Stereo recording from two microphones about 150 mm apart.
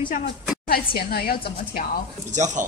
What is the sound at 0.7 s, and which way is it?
A woman's voice, 90° left.